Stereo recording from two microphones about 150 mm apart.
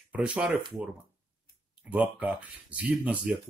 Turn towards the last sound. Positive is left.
turn(degrees=-10)  # may be behind; listen again after turning